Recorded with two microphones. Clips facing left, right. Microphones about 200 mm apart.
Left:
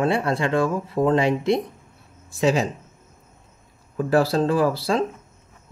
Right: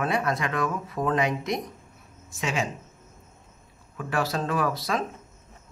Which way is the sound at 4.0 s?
35° left (ahead or behind).